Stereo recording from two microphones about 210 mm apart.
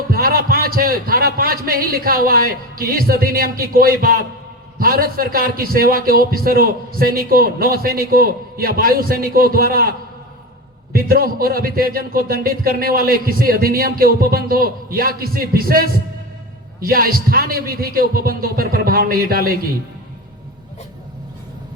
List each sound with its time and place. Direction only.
0.1 s a man's voice: 45° right (ahead or behind)
10.9 s a man's voice: 45° right (ahead or behind)